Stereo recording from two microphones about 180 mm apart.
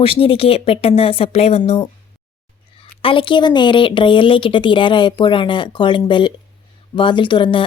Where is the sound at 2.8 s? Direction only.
30° left (ahead or behind).